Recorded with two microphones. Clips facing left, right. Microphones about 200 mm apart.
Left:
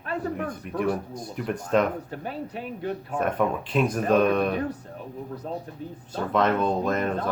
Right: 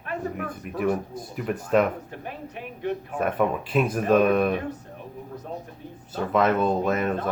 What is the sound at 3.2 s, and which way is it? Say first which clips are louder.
Speech: right 1 dB; 5° right (ahead or behind).